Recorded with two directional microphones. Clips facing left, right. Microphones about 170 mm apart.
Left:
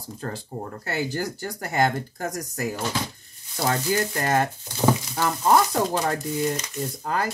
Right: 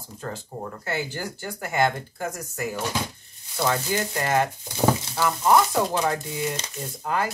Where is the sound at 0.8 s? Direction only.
40° left (ahead or behind).